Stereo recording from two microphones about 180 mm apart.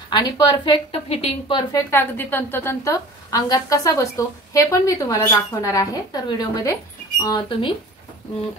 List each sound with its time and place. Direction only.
0.1 s a woman's voice: 25° left (ahead or behind)
1.9 s a woman's voice: 10° left (ahead or behind)